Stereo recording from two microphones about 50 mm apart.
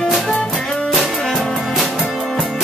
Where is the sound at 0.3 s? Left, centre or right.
Centre.